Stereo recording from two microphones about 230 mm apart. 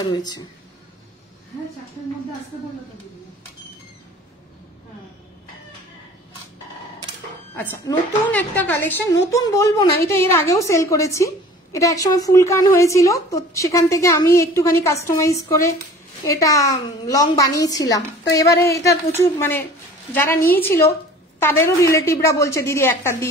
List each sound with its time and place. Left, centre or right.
0.0 s a woman's voice: centre
7.5 s a woman's voice: centre
21.4 s a woman's voice: centre